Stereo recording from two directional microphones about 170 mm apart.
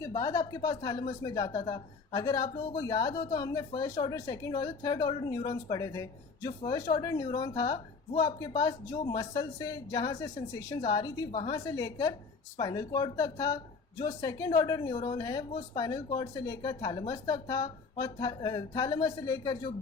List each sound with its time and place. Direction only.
0.0 s speech: 20° left (ahead or behind)
14.9 s speech: 35° left (ahead or behind)
15.2 s speech: 25° left (ahead or behind)